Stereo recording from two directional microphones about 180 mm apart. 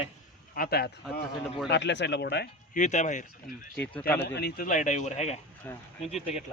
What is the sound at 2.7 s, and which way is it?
Speech, 45° left (ahead or behind).